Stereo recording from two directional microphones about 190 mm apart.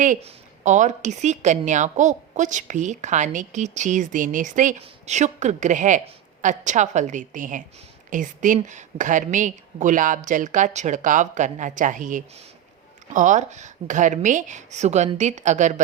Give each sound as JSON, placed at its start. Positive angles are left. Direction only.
{"t": 0.0, "sound": "a woman's voice", "side_deg": -40}